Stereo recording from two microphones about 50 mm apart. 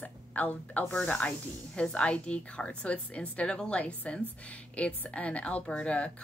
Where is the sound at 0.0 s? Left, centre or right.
Left.